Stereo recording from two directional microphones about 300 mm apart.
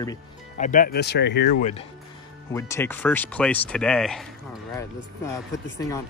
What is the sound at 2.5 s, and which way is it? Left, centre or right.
Speech, centre.